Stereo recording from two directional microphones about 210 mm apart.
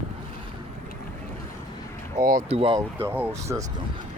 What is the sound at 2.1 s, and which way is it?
Vehicle, 40° right (ahead or behind).